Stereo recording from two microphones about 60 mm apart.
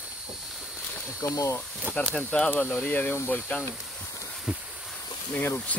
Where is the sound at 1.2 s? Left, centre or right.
Left.